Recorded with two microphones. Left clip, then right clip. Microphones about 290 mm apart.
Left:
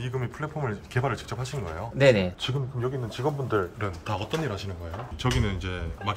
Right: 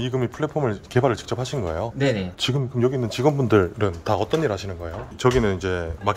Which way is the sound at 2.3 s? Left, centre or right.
Right.